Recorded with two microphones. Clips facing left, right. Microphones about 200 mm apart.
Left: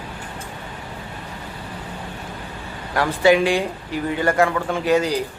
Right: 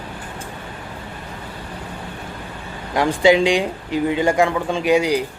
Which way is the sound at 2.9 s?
15° right (ahead or behind).